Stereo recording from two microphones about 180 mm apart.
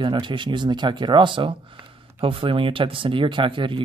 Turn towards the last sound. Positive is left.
turn(degrees=-30)  # may be behind; listen again after turning